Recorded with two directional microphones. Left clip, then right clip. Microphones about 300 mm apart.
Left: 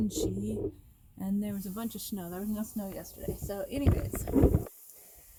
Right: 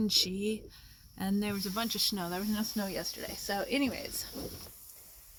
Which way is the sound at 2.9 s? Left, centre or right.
Right.